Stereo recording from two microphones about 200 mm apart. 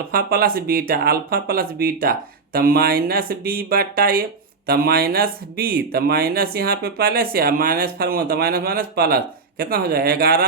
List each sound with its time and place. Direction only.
0.1 s speech: 50° right (ahead or behind)